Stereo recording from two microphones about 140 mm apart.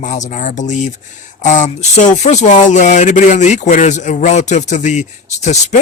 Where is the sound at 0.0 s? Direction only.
60° left (ahead or behind).